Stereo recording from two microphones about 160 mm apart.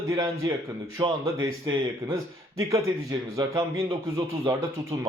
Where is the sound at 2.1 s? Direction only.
20° right (ahead or behind).